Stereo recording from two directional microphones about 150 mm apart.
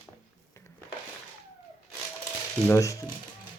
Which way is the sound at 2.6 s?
20° left (ahead or behind).